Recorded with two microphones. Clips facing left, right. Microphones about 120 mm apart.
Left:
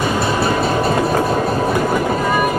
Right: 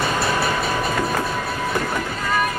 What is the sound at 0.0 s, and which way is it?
Train, 20° left (ahead or behind).